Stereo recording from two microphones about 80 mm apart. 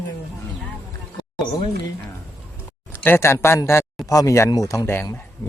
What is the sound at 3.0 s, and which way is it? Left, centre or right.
Speech, left.